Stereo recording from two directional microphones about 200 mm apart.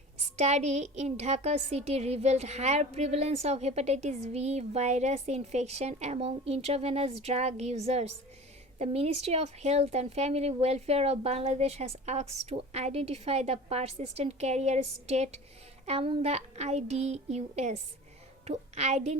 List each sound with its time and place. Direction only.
0.3 s a woman's voice: 35° right (ahead or behind)